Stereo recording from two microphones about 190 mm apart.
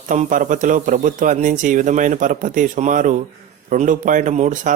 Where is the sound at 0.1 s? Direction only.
45° right (ahead or behind).